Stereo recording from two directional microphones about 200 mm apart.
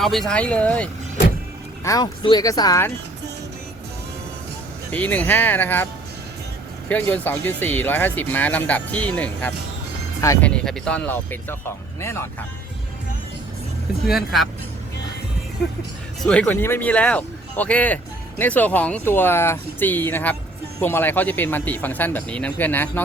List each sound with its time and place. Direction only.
0.0 s speech: centre (ahead or behind)
1.8 s speech: 20° left (ahead or behind)
4.9 s speech: 5° left (ahead or behind)
10.5 s speech: 5° left (ahead or behind)
14.0 s speech: centre (ahead or behind)
16.2 s speech: 5° left (ahead or behind)